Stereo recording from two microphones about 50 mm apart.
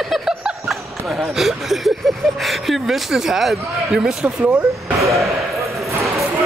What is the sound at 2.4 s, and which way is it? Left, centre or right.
Speech, centre.